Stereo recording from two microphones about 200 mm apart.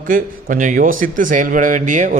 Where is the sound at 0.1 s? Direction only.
40° right (ahead or behind).